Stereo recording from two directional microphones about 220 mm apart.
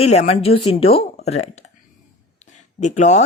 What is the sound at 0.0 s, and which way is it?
Speech, 30° left (ahead or behind).